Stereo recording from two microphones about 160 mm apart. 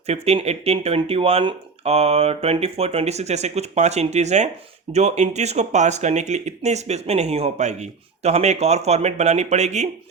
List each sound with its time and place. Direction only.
0.1 s speech: 40° right (ahead or behind)